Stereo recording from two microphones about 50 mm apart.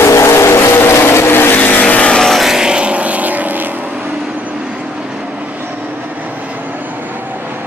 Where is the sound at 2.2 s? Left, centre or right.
Centre.